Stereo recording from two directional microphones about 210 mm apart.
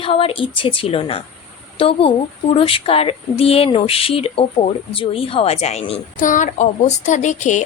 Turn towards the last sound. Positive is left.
turn(degrees=35)  # may be behind; listen again after turning